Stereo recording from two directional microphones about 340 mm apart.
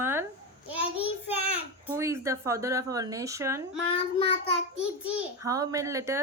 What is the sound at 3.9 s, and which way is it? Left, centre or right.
Speech, centre.